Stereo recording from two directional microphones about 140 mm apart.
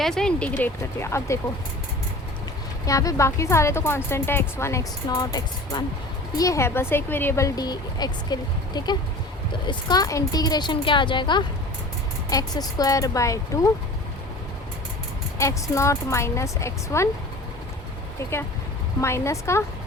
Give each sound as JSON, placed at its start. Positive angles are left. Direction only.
{"t": 0.0, "sound": "speech", "side_deg": 5}
{"t": 2.8, "sound": "a woman's voice", "side_deg": 25}
{"t": 15.4, "sound": "speech", "side_deg": 20}
{"t": 18.2, "sound": "speech", "side_deg": 15}